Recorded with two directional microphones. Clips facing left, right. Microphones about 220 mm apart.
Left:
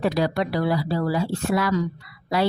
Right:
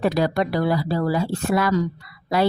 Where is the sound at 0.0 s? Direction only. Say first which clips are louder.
Right 2 dB; 50° right (ahead or behind).